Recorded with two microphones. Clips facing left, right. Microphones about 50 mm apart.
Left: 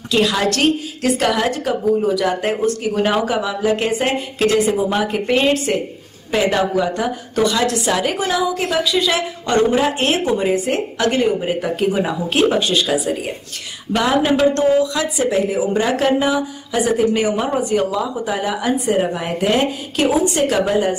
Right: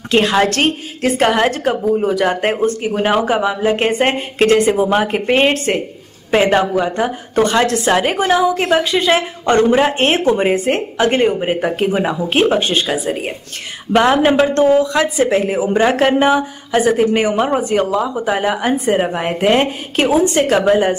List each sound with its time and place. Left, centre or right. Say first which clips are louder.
0.1 s a woman's voice: right 3 dB; right
2.5 s a woman's voice: right 2 dB; right